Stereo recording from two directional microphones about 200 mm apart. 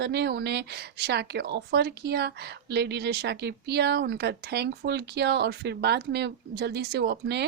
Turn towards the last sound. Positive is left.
turn(degrees=-55)  # may be behind; listen again after turning